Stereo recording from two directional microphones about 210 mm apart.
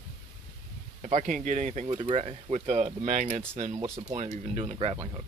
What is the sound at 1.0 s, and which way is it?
Speech, 35° right (ahead or behind).